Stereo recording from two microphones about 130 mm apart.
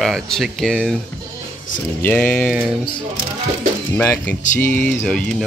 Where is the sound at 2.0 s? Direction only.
10° left (ahead or behind).